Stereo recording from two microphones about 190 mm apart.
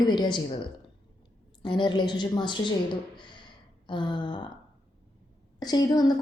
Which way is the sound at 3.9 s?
25° left (ahead or behind).